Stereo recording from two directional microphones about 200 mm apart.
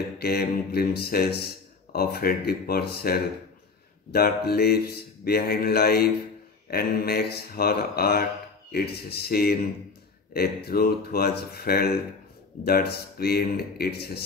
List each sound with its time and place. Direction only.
0.2 s speech: 50° left (ahead or behind)